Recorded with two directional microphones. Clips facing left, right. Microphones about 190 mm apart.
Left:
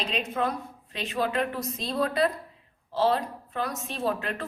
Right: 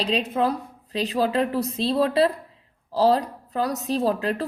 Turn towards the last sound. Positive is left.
turn(degrees=-35)  # may be behind; listen again after turning